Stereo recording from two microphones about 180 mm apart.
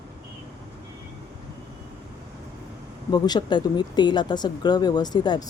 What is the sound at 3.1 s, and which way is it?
Speech, 25° left (ahead or behind).